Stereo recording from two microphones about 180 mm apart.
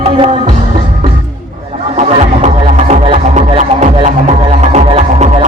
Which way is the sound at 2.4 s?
40° right (ahead or behind).